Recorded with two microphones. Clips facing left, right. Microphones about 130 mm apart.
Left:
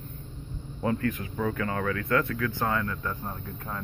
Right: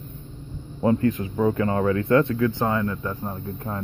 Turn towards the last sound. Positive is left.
turn(degrees=-15)  # may be behind; listen again after turning